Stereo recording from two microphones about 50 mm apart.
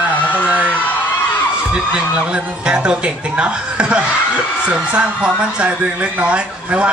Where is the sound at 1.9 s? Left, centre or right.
Centre.